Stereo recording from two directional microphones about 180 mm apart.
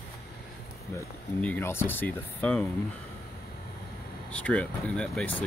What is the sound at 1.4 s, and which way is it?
Speech, 10° left (ahead or behind).